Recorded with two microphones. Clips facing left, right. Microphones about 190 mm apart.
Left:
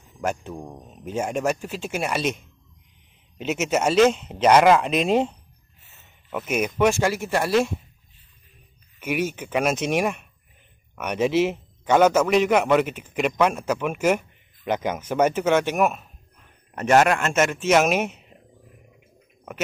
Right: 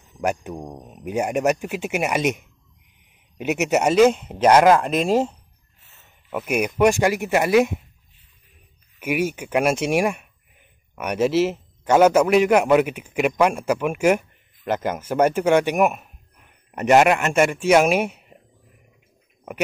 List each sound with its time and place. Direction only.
0.2 s a man's voice: 15° right (ahead or behind)
6.3 s a man's voice: 10° right (ahead or behind)
9.0 s a man's voice: 10° right (ahead or behind)